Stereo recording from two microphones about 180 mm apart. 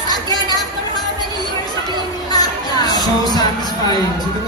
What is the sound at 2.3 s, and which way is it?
Music, 20° left (ahead or behind).